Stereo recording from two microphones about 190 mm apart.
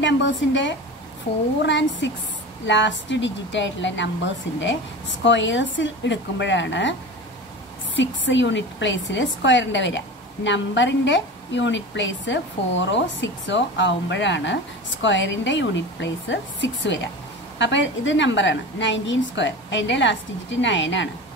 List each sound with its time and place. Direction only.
0.0 s a woman's voice: 70° left (ahead or behind)